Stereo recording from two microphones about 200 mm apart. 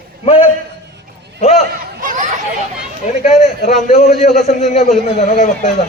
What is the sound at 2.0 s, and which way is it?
Chatter, 40° right (ahead or behind).